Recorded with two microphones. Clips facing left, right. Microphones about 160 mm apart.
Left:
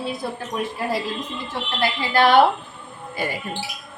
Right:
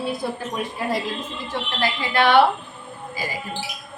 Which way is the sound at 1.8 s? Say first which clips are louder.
Left 2 dB; 35° left (ahead or behind).